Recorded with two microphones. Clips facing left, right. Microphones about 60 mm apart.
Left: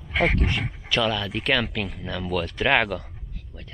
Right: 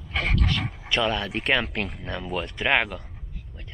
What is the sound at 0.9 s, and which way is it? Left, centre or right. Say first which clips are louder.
Speech: left 1 dB; right.